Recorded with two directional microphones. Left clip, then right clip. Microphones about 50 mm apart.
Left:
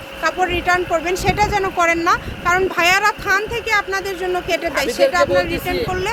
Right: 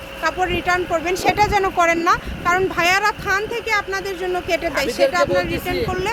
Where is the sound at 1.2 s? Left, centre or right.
Right.